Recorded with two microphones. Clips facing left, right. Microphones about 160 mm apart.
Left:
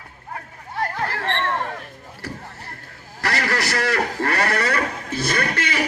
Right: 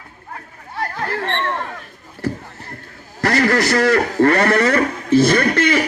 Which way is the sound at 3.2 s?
45° right (ahead or behind).